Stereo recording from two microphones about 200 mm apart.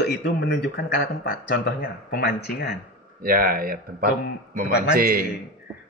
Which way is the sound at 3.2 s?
45° right (ahead or behind).